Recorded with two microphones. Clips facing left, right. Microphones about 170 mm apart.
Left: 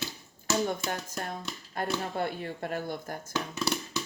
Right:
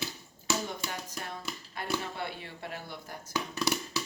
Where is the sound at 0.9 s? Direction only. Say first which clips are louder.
Left 4 dB; 50° left (ahead or behind).